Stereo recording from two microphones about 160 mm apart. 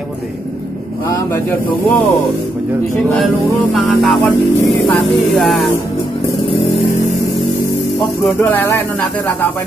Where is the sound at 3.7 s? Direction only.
Centre (ahead or behind).